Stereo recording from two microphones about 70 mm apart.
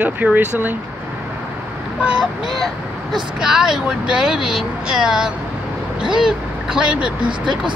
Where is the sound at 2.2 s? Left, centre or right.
Centre.